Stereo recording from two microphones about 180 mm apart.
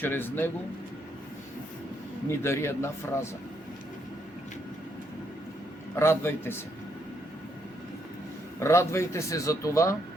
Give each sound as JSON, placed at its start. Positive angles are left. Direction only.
{"t": 0.0, "sound": "speech", "side_deg": 10}
{"t": 2.3, "sound": "speech", "side_deg": 15}
{"t": 6.0, "sound": "speech", "side_deg": 15}
{"t": 8.5, "sound": "speech", "side_deg": 15}